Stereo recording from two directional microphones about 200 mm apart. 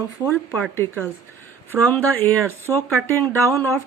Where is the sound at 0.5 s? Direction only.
10° left (ahead or behind).